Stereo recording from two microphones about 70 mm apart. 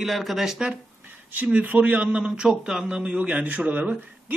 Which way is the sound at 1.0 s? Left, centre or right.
Right.